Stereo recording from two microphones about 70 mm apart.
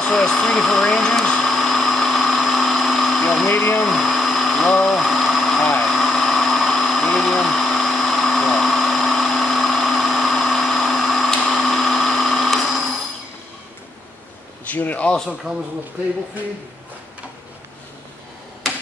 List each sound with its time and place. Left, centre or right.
0.0 s a sound: centre
3.8 s blender: centre
14.7 s a man's voice: left
15.5 s speech: centre